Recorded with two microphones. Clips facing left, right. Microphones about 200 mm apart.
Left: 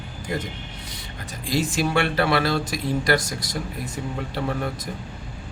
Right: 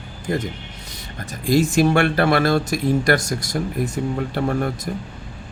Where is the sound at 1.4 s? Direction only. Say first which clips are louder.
Right 7 dB; 45° right (ahead or behind).